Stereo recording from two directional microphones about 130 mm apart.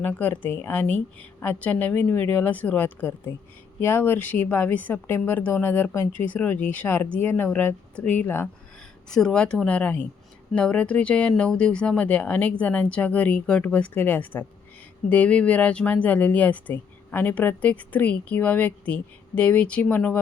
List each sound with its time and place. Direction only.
0.0 s speech: 15° left (ahead or behind)